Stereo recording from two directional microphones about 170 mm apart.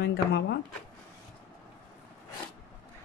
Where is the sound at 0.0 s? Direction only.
80° left.